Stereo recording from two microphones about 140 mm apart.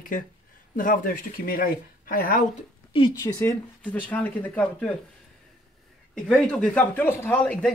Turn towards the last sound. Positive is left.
turn(degrees=10)  # may be behind; listen again after turning